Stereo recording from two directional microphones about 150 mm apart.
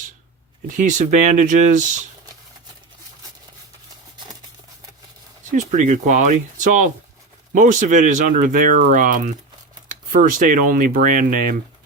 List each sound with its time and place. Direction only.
0.8 s speech: 55° right (ahead or behind)
5.5 s speech: 55° right (ahead or behind)